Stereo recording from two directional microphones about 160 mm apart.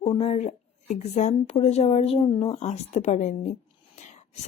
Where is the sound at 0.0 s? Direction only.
40° left (ahead or behind).